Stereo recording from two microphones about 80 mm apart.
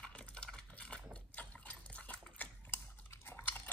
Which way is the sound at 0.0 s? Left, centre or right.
Centre.